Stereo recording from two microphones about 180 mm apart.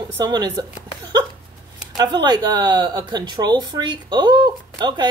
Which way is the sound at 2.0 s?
25° right (ahead or behind).